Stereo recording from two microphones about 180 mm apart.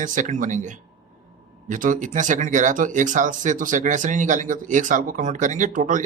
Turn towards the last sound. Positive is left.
turn(degrees=-45)  # may be behind; listen again after turning